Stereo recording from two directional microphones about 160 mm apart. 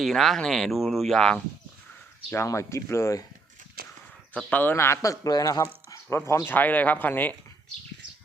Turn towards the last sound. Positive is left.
turn(degrees=10)  # may be behind; listen again after turning